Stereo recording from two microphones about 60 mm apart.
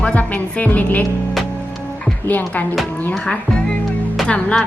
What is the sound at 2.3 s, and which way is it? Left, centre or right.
Speech, left.